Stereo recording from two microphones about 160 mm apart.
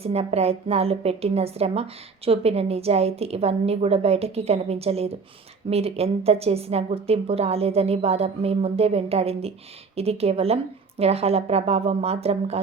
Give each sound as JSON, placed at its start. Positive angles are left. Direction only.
{"t": 0.0, "sound": "a woman's voice", "side_deg": -40}